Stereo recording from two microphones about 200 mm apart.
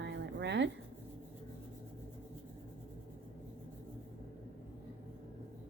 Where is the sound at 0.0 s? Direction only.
60° right (ahead or behind).